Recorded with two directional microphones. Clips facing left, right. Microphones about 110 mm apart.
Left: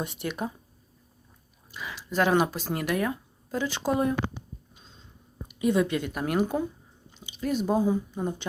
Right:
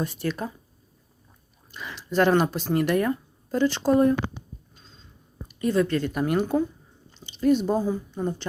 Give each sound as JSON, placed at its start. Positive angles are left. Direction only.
{"t": 0.0, "sound": "speech", "side_deg": 15}
{"t": 1.7, "sound": "speech", "side_deg": 5}
{"t": 4.7, "sound": "a sound", "side_deg": 15}
{"t": 5.5, "sound": "speech", "side_deg": 10}
{"t": 7.1, "sound": "chewing", "side_deg": 10}
{"t": 7.8, "sound": "speech", "side_deg": 10}